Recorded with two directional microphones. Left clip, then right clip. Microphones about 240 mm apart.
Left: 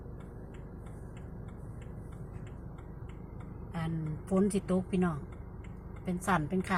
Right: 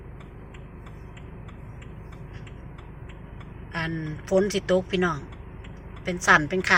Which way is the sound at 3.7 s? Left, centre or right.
Centre.